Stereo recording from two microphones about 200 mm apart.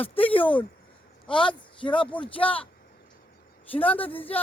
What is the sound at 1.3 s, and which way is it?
Speech, 25° left (ahead or behind).